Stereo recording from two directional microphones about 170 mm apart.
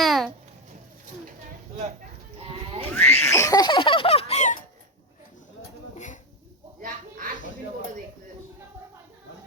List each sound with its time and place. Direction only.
0.0 s babbling: centre (ahead or behind)
2.4 s sheep: 35° right (ahead or behind)
2.9 s laughter: 15° left (ahead or behind); by 4.5 s 40° left (ahead or behind)